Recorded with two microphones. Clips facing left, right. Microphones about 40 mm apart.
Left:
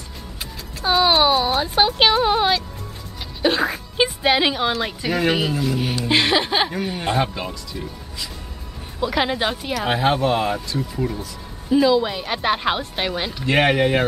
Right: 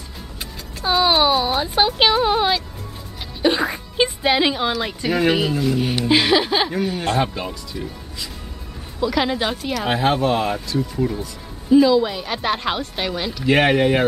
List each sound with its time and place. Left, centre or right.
0.8 s speech: centre
9.0 s speech: centre
13.5 s speech: centre